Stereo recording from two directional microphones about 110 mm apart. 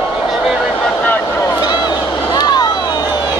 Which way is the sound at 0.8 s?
10° left (ahead or behind).